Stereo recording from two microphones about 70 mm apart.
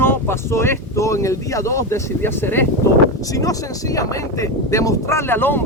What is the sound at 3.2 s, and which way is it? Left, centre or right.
Speech, left.